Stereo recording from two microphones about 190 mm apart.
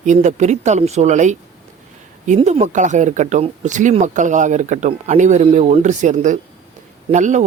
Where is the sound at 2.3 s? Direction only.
35° right (ahead or behind).